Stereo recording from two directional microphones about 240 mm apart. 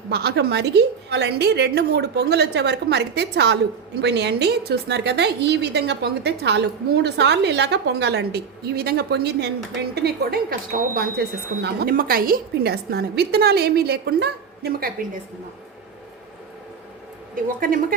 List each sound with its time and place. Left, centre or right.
0.1 s a woman's voice: right
17.3 s a woman's voice: right